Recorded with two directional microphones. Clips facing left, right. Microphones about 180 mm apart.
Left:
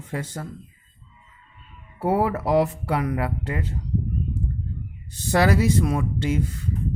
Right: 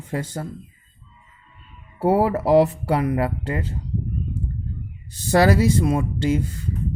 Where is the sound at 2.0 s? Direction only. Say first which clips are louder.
Right 3 dB; 30° right (ahead or behind).